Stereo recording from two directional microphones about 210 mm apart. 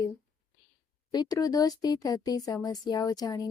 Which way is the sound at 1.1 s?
20° left (ahead or behind).